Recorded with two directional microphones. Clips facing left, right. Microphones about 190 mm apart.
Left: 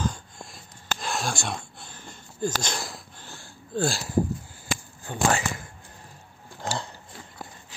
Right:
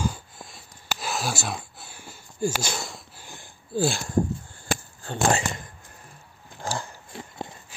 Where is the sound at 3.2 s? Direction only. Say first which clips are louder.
Even; 15° right (ahead or behind).